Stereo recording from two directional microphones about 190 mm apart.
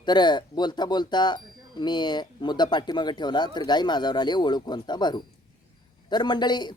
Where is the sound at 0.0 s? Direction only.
25° left (ahead or behind).